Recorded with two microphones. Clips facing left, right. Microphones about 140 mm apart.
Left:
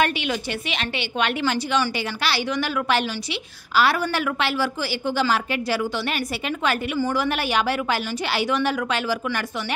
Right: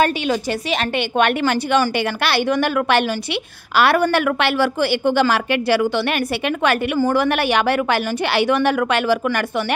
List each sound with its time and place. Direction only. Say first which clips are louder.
0.0 s a woman's voice: right 5 dB; 40° right (ahead or behind); by 9.8 s 65° right (ahead or behind)